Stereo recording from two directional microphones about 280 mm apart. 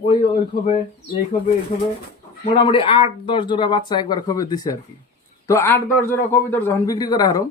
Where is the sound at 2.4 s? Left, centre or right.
Centre.